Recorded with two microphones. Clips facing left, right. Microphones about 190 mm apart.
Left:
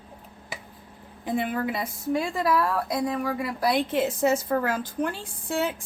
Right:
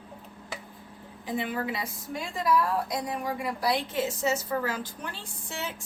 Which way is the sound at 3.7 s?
55° left (ahead or behind).